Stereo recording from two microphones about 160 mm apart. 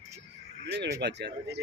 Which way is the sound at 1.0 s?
90° right.